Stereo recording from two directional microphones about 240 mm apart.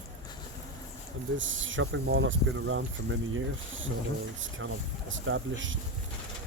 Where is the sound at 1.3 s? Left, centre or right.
Right.